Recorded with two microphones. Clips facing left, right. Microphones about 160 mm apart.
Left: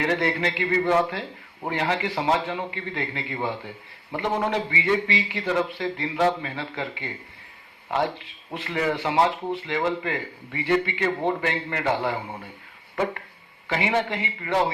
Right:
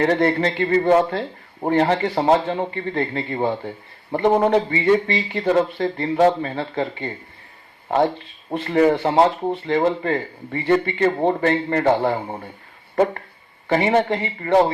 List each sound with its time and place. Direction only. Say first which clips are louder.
0.0 s a man's voice: right 6 dB; 50° right (ahead or behind)
13.7 s a man's voice: right 7 dB; 50° right (ahead or behind)